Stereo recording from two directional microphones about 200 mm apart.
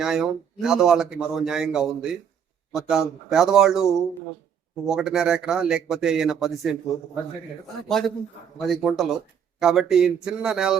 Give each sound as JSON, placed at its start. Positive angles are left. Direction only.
{"t": 0.0, "sound": "speech", "side_deg": -5}
{"t": 7.9, "sound": "speech", "side_deg": 0}